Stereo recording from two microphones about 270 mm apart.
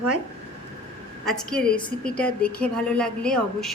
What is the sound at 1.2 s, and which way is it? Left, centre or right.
A woman's voice, centre.